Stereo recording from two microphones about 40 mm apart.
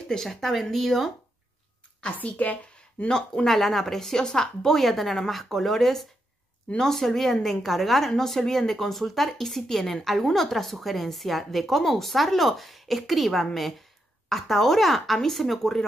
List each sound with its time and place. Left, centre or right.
0.1 s a woman's voice: centre
2.0 s a woman's voice: left
3.4 s a woman's voice: centre